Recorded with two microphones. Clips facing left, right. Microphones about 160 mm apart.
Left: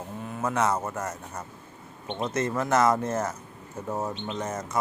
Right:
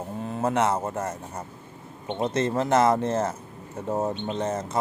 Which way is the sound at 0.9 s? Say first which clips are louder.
Right 3 dB; 30° right (ahead or behind).